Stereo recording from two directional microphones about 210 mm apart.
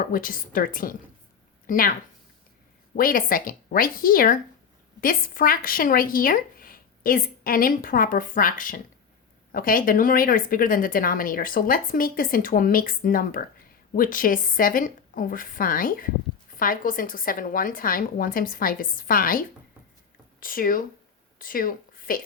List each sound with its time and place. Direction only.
0.0 s a woman's voice: 40° left (ahead or behind)
2.9 s a woman's voice: 40° left (ahead or behind)